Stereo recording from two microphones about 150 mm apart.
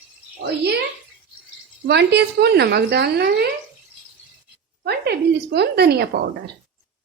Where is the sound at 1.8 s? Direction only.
90° right.